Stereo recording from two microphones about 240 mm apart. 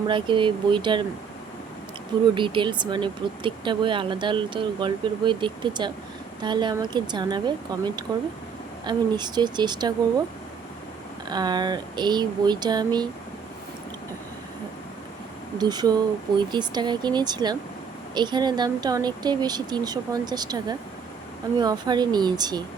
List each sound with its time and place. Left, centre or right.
0.1 s speech: right
2.3 s speech: centre
11.3 s speech: centre
15.5 s speech: centre